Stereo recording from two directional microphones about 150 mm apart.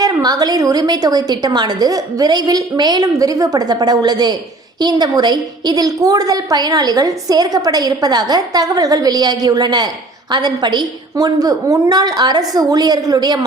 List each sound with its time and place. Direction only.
0.0 s a woman's voice: 25° right (ahead or behind)